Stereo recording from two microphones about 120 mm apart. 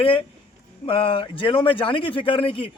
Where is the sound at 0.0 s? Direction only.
45° left (ahead or behind).